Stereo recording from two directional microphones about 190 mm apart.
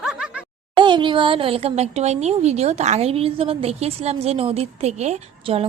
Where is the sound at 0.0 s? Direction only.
5° right (ahead or behind).